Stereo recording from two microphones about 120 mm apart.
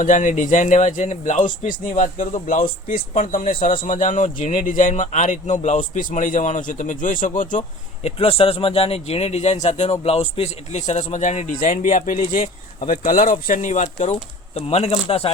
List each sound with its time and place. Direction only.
0.0 s speech: 90° left
8.0 s speech: 55° left (ahead or behind)